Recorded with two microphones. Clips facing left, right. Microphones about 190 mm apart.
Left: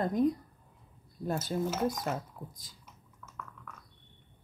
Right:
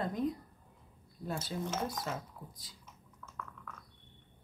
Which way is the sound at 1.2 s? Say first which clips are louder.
Left 6 dB; 45° left (ahead or behind).